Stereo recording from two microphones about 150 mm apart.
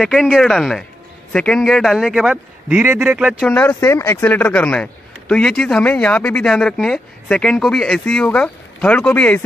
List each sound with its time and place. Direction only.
0.0 s a man's voice: 5° left (ahead or behind)
3.4 s speech: 10° left (ahead or behind)